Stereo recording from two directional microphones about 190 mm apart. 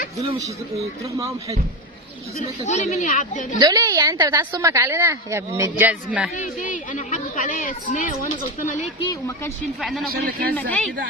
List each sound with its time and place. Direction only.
0.3 s a woman's voice: 20° right (ahead or behind)
2.6 s speech: 40° left (ahead or behind)
3.6 s a woman's voice: 20° right (ahead or behind)
6.3 s a woman's voice: 40° left (ahead or behind)
9.0 s speech: 20° left (ahead or behind)
9.8 s a man's voice: centre (ahead or behind)